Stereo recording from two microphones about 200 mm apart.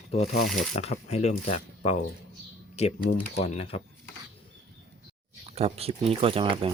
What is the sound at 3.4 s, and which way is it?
Speech, 30° left (ahead or behind).